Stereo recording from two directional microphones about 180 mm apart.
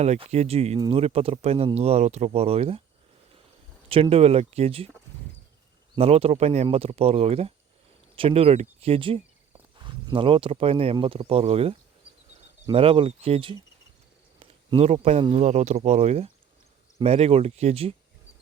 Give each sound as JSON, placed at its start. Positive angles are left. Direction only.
{"t": 0.0, "sound": "speech", "side_deg": -40}
{"t": 3.8, "sound": "speech", "side_deg": -30}
{"t": 6.0, "sound": "speech", "side_deg": -35}